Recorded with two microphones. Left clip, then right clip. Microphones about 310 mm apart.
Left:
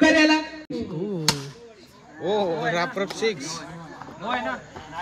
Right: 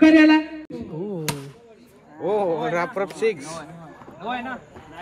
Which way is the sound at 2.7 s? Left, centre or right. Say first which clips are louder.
Right 1 dB; right.